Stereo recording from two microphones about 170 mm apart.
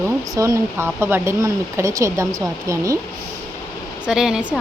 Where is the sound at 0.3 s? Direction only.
20° right (ahead or behind).